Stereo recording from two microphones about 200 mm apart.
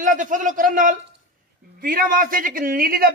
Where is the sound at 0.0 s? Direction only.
40° right (ahead or behind).